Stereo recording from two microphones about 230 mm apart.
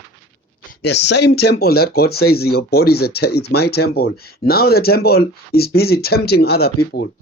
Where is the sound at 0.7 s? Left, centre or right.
Left.